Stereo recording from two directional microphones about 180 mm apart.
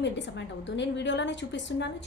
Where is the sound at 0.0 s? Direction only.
80° left.